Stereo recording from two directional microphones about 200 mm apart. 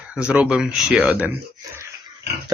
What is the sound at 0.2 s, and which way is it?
Speech, 5° right (ahead or behind).